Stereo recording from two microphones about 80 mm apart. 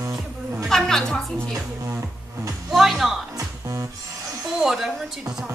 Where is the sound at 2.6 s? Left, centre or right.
Centre.